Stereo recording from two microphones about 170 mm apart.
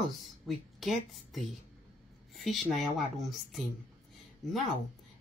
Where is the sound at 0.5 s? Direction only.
Centre (ahead or behind).